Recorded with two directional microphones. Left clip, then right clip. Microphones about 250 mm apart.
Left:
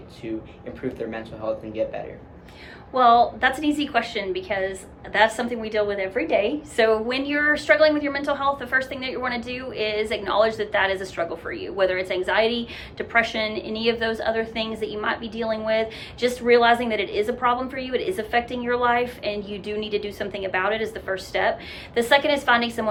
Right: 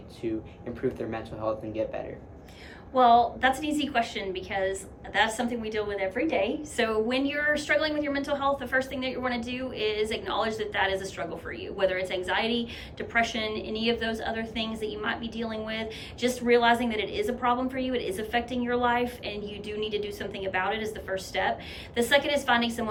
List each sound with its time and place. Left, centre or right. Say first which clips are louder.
0.8 s speech: left 1 dB; centre
2.9 s a woman's voice: left 4 dB; centre